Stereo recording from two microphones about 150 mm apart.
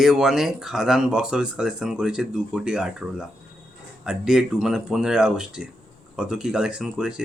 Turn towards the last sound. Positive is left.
turn(degrees=-5)  # may be behind; listen again after turning